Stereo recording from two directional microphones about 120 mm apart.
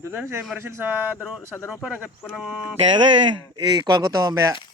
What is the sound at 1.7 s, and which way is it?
Speech, 5° right (ahead or behind).